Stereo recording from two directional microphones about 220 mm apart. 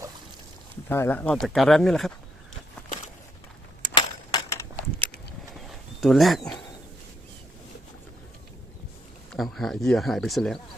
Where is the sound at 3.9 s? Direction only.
20° left (ahead or behind).